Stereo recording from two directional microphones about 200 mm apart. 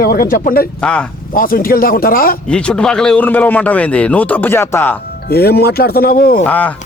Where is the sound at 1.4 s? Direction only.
45° left (ahead or behind).